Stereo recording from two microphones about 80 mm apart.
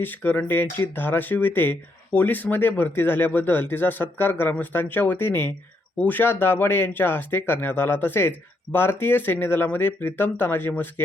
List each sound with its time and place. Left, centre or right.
0.0 s speech: left